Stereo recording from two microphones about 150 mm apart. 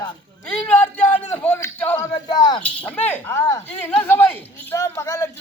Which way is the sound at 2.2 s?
30° left (ahead or behind).